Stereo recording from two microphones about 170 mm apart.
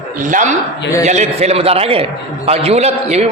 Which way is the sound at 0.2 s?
45° right (ahead or behind).